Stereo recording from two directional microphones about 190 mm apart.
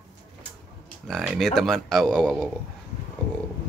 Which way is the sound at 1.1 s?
Centre (ahead or behind).